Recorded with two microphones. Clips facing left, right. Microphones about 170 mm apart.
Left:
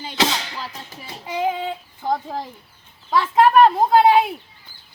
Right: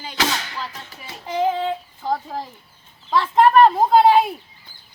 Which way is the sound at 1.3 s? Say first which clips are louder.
Right 2 dB; 10° left (ahead or behind).